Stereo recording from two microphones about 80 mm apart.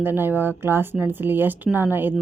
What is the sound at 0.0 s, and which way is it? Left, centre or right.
Speech, right.